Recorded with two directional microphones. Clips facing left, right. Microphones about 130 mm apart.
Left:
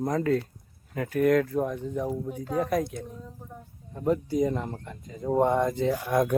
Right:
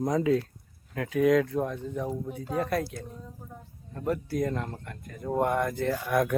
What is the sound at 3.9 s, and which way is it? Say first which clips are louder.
Speech: left 4 dB; 15° left (ahead or behind).